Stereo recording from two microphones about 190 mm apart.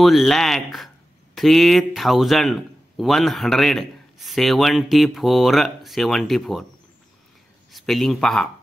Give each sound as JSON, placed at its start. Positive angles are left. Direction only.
{"t": 0.0, "sound": "a man's voice", "side_deg": 0}
{"t": 7.7, "sound": "a man's voice", "side_deg": 0}